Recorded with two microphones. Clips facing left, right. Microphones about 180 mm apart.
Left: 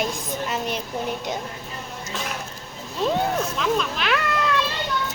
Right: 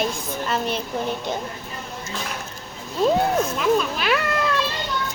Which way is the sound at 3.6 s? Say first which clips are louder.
Right 3 dB; 10° right (ahead or behind).